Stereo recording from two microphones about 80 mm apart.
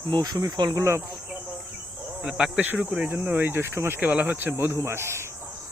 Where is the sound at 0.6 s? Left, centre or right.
Right.